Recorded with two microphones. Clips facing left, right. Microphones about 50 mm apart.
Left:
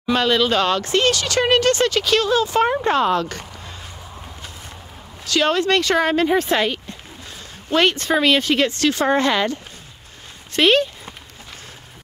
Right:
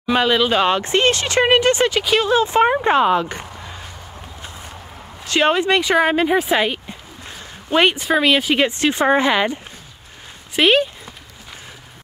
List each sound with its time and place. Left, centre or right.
0.0 s speech: centre
5.2 s speech: right